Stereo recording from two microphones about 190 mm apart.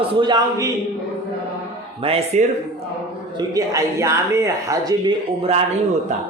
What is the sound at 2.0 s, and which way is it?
Speech, 30° right (ahead or behind).